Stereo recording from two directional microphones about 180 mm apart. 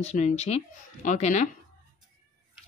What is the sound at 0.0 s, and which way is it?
Speech, 40° left (ahead or behind).